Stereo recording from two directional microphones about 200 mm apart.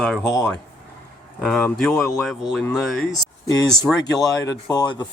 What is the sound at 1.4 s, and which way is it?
Speech, 5° left (ahead or behind).